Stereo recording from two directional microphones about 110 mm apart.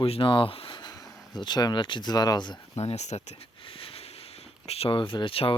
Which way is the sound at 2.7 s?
80° left.